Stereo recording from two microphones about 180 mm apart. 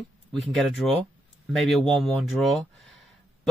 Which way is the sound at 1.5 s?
Centre (ahead or behind).